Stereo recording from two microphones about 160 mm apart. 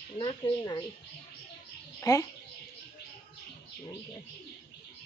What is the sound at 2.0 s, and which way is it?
Speech, 20° left (ahead or behind).